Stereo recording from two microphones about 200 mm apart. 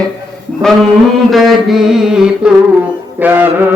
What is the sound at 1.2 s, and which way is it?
Mantra, centre (ahead or behind).